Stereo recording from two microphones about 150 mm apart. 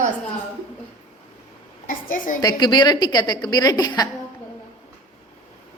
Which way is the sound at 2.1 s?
60° left (ahead or behind).